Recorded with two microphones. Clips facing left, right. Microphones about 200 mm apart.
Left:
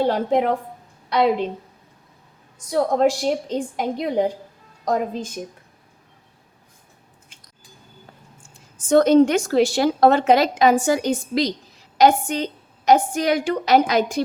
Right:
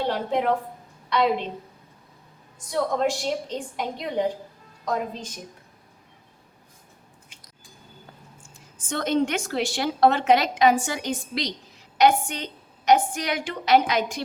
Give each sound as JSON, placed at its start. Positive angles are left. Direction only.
{"t": 0.0, "sound": "a woman's voice", "side_deg": 45}
{"t": 2.6, "sound": "a woman's voice", "side_deg": 45}
{"t": 8.9, "sound": "a woman's voice", "side_deg": 40}